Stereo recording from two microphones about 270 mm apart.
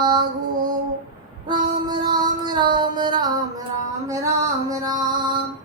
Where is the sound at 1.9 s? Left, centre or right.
Centre.